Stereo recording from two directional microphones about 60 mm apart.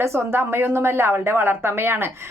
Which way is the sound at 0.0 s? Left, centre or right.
Right.